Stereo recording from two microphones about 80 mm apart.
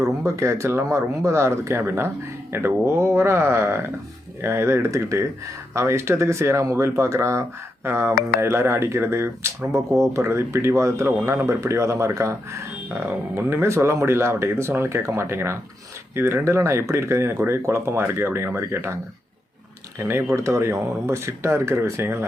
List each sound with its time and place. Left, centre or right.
0.3 s speech: right
20.0 s speech: right